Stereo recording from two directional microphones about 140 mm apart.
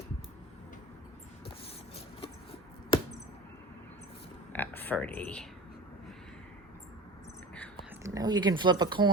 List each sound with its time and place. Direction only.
4.5 s a sound: 15° left (ahead or behind)
7.5 s whispering: 10° left (ahead or behind)
8.0 s speech: 25° right (ahead or behind)